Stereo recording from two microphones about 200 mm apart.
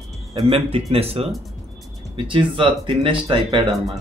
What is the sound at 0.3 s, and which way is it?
Speech, 30° right (ahead or behind).